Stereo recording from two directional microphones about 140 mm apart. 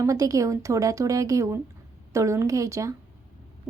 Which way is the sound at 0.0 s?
25° right (ahead or behind).